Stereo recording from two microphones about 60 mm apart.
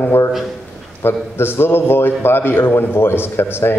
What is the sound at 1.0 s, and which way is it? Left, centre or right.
A man's voice, left.